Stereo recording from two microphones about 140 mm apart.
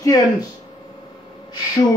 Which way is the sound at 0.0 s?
25° left (ahead or behind).